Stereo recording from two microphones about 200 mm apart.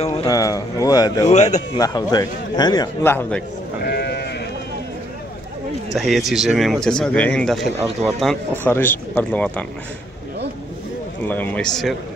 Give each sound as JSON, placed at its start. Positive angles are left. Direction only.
{"t": 0.0, "sound": "a man's voice", "side_deg": 30}
{"t": 0.3, "sound": "speech", "side_deg": 15}
{"t": 1.2, "sound": "a man's voice", "side_deg": 35}
{"t": 1.8, "sound": "a man's voice", "side_deg": 20}
{"t": 3.8, "sound": "sheep", "side_deg": 55}
{"t": 5.9, "sound": "speech", "side_deg": 0}
{"t": 11.2, "sound": "speech", "side_deg": 10}